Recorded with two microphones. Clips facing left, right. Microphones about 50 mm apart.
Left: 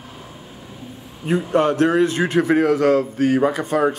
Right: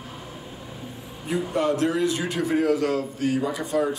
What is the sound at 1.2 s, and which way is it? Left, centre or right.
A man's voice, left.